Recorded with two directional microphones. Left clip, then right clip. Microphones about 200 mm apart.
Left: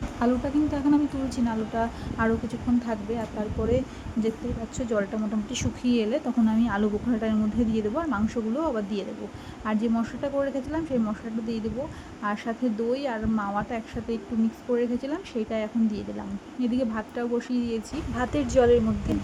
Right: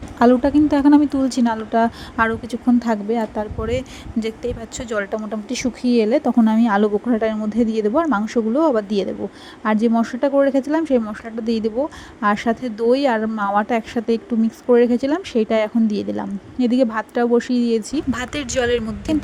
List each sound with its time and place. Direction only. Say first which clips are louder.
0.2 s speech: right 11 dB; 40° right (ahead or behind)
5.5 s speech: right 9 dB; 30° right (ahead or behind)
18.1 s speech: left 2 dB; 50° right (ahead or behind)